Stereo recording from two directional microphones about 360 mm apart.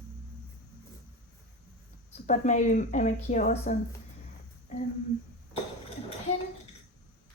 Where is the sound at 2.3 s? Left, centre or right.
Centre.